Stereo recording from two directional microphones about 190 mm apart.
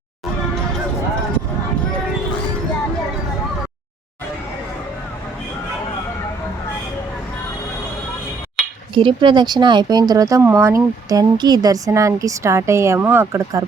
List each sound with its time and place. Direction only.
9.0 s speech: 25° right (ahead or behind)